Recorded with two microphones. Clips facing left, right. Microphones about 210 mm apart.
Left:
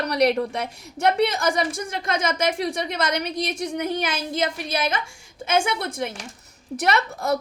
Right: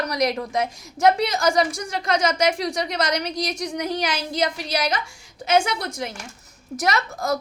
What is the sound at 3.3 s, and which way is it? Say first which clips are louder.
Speech: even; 25° left (ahead or behind).